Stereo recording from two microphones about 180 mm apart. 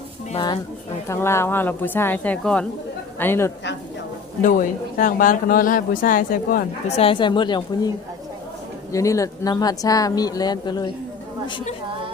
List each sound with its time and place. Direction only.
0.3 s a woman's voice: 25° left (ahead or behind)
1.0 s a woman's voice: 15° left (ahead or behind)
4.4 s speech: 45° left (ahead or behind)
6.9 s speech: 30° left (ahead or behind)